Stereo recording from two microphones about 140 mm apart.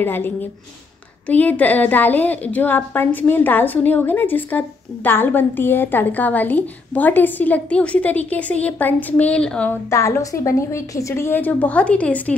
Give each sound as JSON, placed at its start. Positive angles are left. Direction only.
{"t": 0.0, "sound": "a woman's voice", "side_deg": 15}
{"t": 9.8, "sound": "a woman's voice", "side_deg": 20}